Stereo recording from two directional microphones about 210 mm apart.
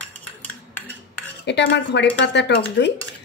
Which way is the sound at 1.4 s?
55° left (ahead or behind).